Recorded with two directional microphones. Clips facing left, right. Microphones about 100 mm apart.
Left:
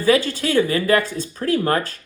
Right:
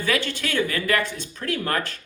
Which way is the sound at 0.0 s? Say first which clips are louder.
Left 8 dB; 30° left (ahead or behind).